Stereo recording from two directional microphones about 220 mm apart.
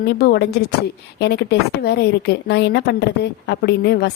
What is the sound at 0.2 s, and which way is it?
A woman's voice, 45° left (ahead or behind).